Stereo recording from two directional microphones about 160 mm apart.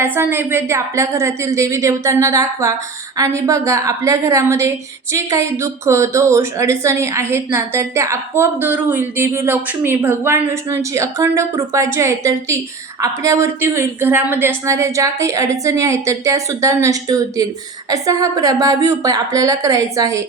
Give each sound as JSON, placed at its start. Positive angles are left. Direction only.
{"t": 0.0, "sound": "a woman's voice", "side_deg": -15}